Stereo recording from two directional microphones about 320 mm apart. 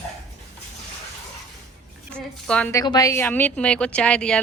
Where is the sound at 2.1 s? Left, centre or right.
Centre.